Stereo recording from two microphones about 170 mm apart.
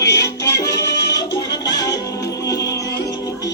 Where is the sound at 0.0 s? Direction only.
15° left (ahead or behind).